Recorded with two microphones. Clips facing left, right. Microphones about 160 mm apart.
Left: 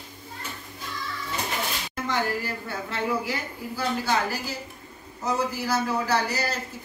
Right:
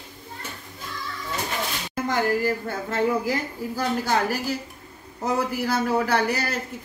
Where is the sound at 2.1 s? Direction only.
45° right (ahead or behind).